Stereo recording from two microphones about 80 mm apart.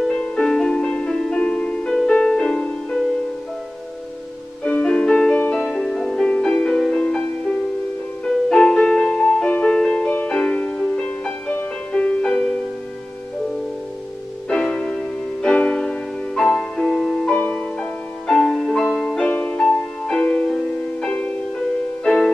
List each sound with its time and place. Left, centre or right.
0.1 s music: centre
4.6 s music: centre
8.5 s music: centre
14.5 s music: centre
22.0 s music: centre